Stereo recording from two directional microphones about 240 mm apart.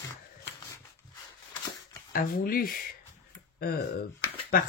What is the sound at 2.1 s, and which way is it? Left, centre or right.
Speech, left.